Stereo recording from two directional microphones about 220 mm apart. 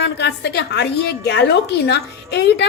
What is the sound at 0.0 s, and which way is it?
A woman's voice, 50° left (ahead or behind).